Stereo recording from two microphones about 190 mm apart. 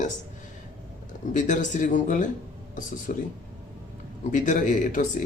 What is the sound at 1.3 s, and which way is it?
Speech, 40° left (ahead or behind).